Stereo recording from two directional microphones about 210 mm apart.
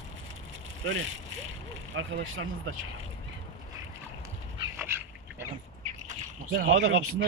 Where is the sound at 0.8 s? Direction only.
70° right (ahead or behind).